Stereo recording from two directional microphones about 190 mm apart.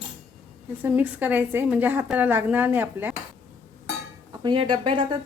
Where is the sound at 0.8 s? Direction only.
10° right (ahead or behind).